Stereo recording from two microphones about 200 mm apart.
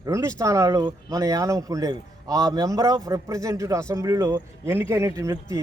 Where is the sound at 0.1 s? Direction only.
15° right (ahead or behind).